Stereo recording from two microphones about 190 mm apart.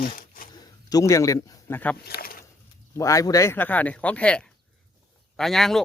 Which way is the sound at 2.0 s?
50° left (ahead or behind).